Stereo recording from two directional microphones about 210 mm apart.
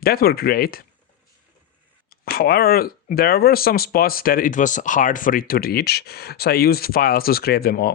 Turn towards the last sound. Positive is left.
turn(degrees=45)  # may be behind; listen again after turning